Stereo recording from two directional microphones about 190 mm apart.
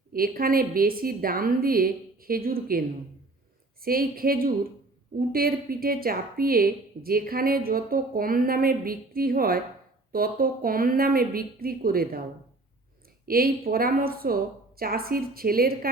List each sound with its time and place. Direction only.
0.1 s a woman's voice: 50° right (ahead or behind)
13.2 s a woman's voice: 50° right (ahead or behind)